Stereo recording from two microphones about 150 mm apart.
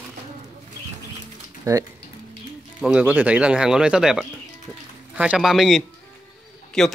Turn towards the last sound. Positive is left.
turn(degrees=5)  # may be behind; listen again after turning